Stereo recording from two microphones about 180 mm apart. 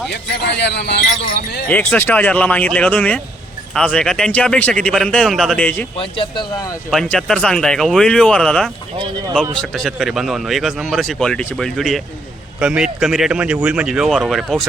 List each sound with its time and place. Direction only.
0.1 s speech: 70° left (ahead or behind)
1.6 s speech: 10° left (ahead or behind)
6.0 s speech: 25° left (ahead or behind)
6.9 s speech: centre (ahead or behind)